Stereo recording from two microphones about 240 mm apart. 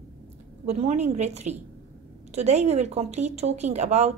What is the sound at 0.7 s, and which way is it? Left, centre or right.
Speech, right.